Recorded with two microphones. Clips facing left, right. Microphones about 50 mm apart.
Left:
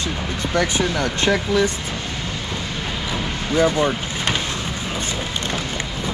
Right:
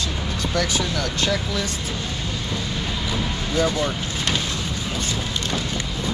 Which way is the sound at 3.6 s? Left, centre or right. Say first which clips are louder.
Left 4 dB; left.